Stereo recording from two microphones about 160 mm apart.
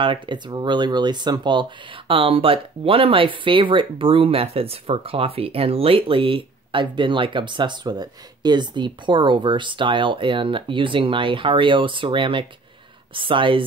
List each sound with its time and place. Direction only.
0.0 s speech: 30° right (ahead or behind)